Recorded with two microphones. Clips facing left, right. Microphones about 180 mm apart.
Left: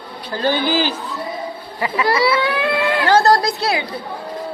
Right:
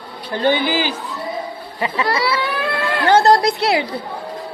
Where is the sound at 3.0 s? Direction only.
20° right (ahead or behind).